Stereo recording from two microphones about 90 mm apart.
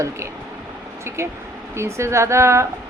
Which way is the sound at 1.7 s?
30° right (ahead or behind).